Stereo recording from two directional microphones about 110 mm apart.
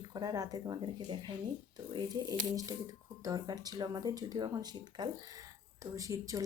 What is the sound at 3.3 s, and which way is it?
A woman's voice, 35° right (ahead or behind).